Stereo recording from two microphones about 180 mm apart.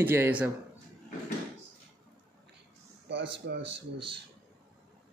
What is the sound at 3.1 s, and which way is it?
Speech, 90° right.